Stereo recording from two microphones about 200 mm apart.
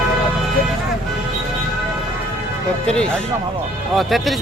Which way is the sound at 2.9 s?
5° left (ahead or behind).